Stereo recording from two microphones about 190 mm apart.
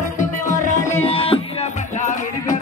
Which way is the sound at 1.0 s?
30° left (ahead or behind).